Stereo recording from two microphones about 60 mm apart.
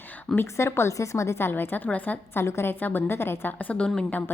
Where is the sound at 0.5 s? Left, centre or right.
Left.